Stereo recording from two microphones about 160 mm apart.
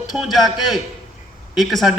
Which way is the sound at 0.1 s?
Centre (ahead or behind).